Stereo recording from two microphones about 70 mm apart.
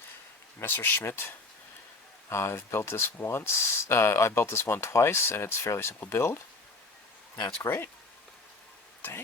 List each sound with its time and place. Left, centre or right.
0.6 s speech: left
2.3 s speech: left
7.7 s speech: left
9.0 s a sound: left